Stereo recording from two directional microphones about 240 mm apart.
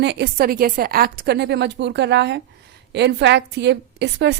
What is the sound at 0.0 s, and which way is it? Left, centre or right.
A woman's voice, right.